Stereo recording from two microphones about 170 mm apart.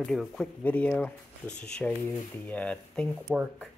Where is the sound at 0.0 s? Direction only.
5° left (ahead or behind).